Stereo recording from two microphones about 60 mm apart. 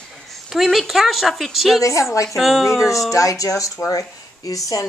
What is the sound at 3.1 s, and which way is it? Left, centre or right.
A woman's voice, left.